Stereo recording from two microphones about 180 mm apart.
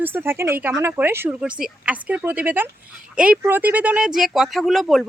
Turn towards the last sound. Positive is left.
turn(degrees=0)  # may be behind; listen again after turning